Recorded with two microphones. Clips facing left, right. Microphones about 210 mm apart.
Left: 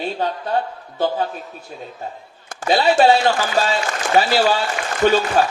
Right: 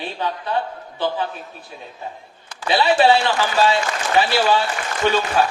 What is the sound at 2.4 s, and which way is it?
A woman's voice, 45° left (ahead or behind).